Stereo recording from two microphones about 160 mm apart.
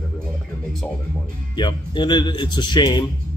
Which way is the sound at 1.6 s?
30° left (ahead or behind).